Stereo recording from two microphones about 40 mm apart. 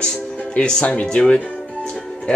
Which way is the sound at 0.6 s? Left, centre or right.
Left.